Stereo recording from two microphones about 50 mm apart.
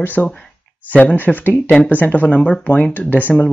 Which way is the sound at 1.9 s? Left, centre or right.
Left.